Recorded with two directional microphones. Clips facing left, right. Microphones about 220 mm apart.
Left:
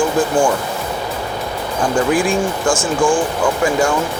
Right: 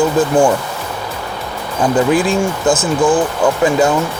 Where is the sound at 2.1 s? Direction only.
20° right (ahead or behind).